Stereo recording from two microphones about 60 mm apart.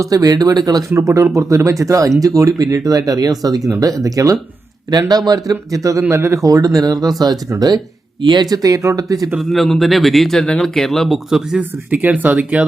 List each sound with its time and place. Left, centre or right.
0.0 s speech: right
0.9 s speech: right
4.9 s speech: right
6.0 s speech: right
8.4 s speech: right
9.4 s speech: centre
11.3 s speech: centre
11.9 s speech: right